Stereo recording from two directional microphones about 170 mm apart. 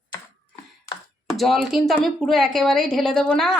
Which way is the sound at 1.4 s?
Centre (ahead or behind).